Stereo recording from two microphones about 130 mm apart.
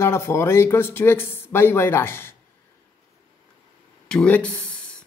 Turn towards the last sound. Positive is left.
turn(degrees=10)  # may be behind; listen again after turning